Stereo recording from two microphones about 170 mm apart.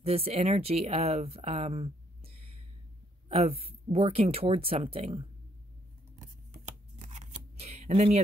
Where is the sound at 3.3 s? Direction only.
35° right (ahead or behind).